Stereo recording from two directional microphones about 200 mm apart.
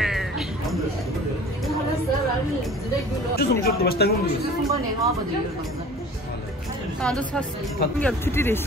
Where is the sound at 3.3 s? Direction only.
50° left (ahead or behind).